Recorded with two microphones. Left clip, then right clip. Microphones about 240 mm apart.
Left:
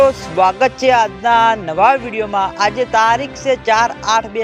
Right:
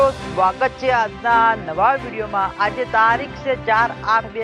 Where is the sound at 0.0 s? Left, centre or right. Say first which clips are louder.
Left 5 dB; left.